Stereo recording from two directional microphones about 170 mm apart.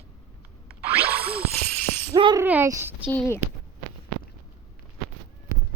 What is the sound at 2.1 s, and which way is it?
Shatter, 30° right (ahead or behind).